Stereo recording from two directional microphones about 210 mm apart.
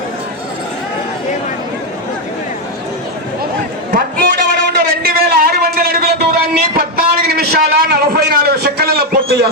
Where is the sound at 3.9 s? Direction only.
40° right (ahead or behind).